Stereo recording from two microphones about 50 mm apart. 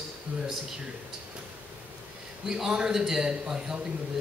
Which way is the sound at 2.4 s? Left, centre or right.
Centre.